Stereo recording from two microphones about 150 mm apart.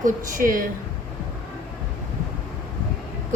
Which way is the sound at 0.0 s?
65° right (ahead or behind).